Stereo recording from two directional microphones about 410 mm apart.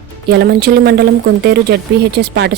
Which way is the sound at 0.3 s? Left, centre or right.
Right.